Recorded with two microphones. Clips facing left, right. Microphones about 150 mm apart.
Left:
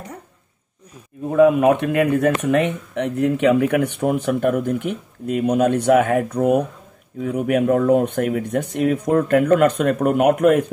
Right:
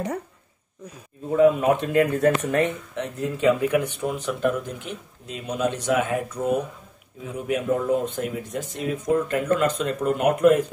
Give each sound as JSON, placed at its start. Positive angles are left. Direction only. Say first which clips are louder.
{"t": 1.3, "sound": "speech", "louder": "left 4 dB", "side_deg": 65}